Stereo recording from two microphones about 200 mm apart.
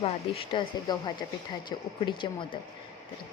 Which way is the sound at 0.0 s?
25° left (ahead or behind).